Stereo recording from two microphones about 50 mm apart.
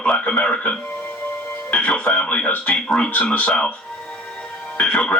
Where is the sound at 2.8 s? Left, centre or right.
Centre.